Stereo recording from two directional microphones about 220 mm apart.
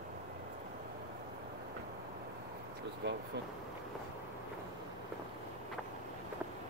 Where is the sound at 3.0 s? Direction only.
50° right (ahead or behind).